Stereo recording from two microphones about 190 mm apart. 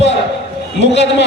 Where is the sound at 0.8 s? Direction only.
65° left (ahead or behind).